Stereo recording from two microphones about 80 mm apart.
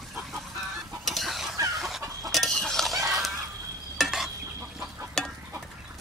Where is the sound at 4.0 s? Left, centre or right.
Centre.